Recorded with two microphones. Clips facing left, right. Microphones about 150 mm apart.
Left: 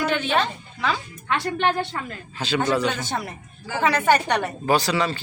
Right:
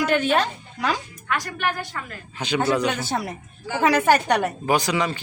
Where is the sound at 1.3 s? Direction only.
25° left (ahead or behind).